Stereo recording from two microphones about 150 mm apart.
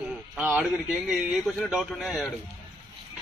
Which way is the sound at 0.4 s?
5° right (ahead or behind).